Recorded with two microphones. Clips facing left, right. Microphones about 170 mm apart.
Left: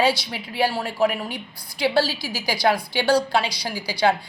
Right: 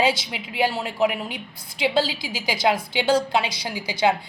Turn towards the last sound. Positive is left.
turn(degrees=-20)  # may be behind; listen again after turning